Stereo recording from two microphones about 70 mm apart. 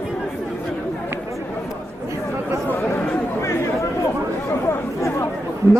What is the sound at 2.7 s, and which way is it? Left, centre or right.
Chatter, left.